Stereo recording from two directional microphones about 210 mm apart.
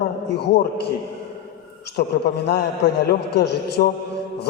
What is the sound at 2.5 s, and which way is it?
A man's voice, 50° left (ahead or behind).